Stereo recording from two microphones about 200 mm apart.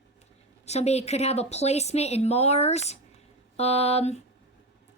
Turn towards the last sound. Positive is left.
turn(degrees=30)  # may be behind; listen again after turning